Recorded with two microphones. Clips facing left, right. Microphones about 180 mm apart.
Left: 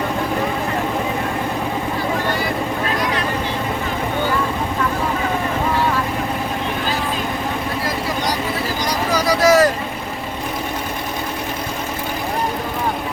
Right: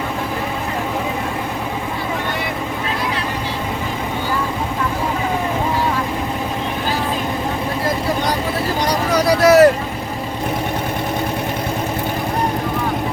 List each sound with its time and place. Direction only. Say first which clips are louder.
8.9 s vehicle: right 2 dB; 65° right (ahead or behind)